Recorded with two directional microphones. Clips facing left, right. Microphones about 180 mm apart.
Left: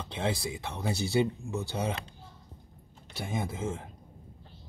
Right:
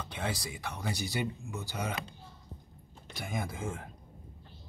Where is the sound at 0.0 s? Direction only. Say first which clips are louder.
Left 5 dB; 25° left (ahead or behind).